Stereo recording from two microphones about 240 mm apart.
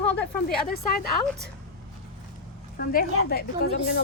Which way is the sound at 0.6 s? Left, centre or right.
Left.